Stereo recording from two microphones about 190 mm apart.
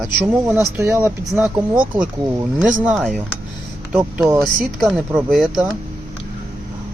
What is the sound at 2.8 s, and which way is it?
Speech, 5° right (ahead or behind).